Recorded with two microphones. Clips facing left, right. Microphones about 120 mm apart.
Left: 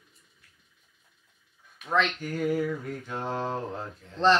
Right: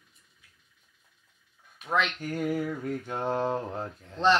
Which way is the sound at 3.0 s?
15° right (ahead or behind).